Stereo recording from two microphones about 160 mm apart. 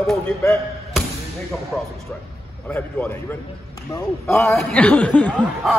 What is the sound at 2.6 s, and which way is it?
Speech, 10° left (ahead or behind).